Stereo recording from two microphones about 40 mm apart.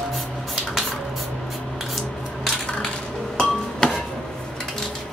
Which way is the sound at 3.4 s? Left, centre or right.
Left.